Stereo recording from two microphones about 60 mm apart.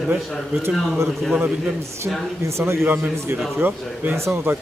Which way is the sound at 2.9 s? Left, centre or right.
Right.